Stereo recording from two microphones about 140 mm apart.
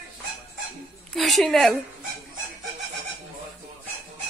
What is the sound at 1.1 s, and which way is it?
Speech, centre (ahead or behind).